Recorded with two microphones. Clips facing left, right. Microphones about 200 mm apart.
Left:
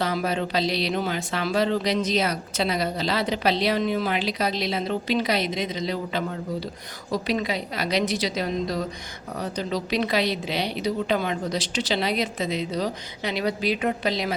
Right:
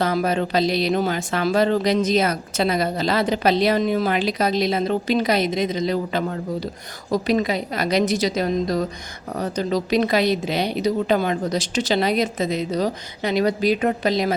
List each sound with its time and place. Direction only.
0.0 s speech: 45° right (ahead or behind)